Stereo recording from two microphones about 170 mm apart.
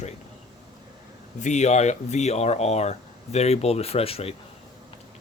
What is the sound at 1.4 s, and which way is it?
Speech, 45° left (ahead or behind).